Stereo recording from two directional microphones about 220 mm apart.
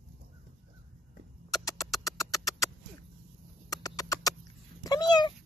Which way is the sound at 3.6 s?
15° left (ahead or behind).